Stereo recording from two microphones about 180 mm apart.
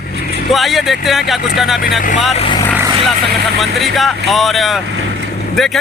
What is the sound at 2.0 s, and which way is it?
Speech, 45° left (ahead or behind).